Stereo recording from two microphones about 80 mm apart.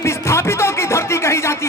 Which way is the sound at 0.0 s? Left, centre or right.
Left.